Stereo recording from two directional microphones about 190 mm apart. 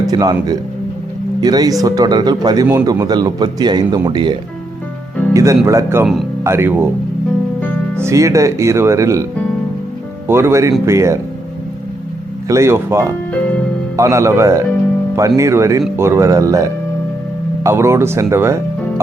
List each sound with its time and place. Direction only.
0.0 s speech: 20° right (ahead or behind)
7.9 s speech: 15° right (ahead or behind)
10.2 s speech: 15° right (ahead or behind)
12.5 s speech: 15° right (ahead or behind)